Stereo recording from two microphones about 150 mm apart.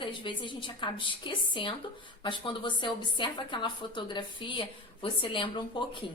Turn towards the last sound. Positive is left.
turn(degrees=30)  # may be behind; listen again after turning